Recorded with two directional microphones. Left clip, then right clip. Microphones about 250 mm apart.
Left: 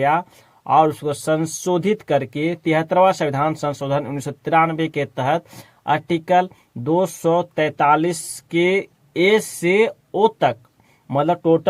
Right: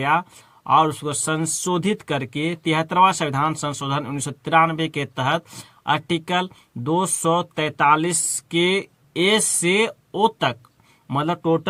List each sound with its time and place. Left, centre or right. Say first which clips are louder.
0.7 s speech: left 2 dB; right